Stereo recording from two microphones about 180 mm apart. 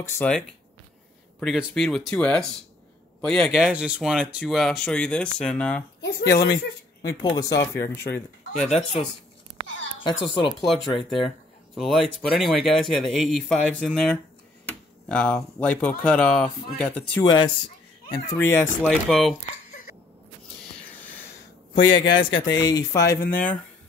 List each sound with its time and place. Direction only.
0.0 s speech: 5° left (ahead or behind)
5.9 s speech: 65° left (ahead or behind)
6.5 s speech: 20° left (ahead or behind)
8.5 s speech: 40° left (ahead or behind)
10.0 s speech: 25° left (ahead or behind)
11.0 s speech: centre (ahead or behind)
17.2 s speech: 25° left (ahead or behind)
18.9 s speech: centre (ahead or behind)
21.8 s speech: 25° left (ahead or behind)